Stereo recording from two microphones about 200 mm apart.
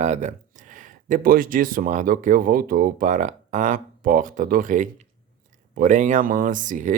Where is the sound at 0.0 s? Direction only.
35° right (ahead or behind).